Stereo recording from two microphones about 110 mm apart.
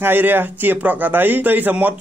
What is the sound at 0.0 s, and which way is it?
Speech, 20° right (ahead or behind).